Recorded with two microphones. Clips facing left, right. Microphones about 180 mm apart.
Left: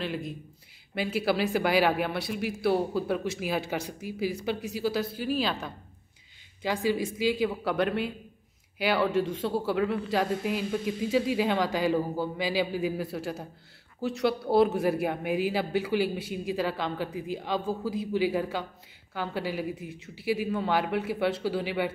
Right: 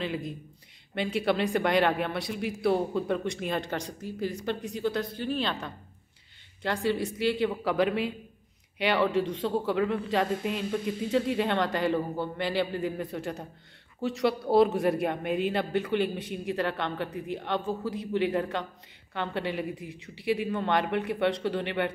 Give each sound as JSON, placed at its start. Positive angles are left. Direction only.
{"t": 0.0, "sound": "a man's voice", "side_deg": 0}